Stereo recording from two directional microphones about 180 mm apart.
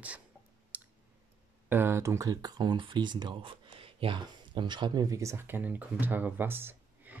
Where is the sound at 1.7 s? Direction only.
15° right (ahead or behind).